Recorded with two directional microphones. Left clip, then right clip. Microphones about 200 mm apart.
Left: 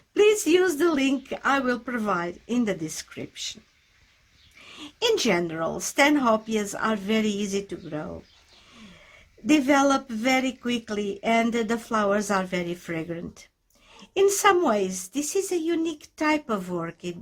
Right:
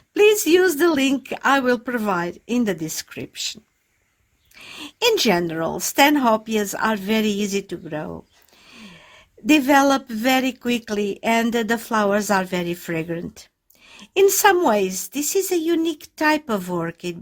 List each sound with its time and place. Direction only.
0.1 s speech: 20° right (ahead or behind)
4.7 s speech: 25° right (ahead or behind)
9.5 s speech: 25° right (ahead or behind)